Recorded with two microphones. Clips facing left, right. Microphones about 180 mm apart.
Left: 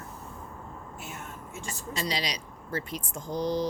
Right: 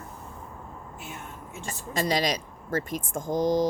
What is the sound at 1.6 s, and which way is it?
Speech, 50° right (ahead or behind).